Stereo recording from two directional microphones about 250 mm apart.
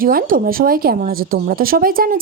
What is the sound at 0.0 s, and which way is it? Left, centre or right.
Speech, right.